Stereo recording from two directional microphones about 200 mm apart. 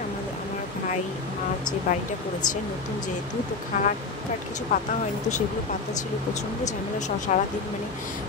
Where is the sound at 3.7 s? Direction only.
35° left (ahead or behind).